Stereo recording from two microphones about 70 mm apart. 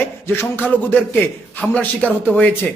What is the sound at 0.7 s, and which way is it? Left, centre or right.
A man's voice, left.